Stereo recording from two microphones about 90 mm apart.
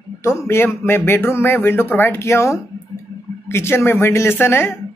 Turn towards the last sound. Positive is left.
turn(degrees=30)  # may be behind; listen again after turning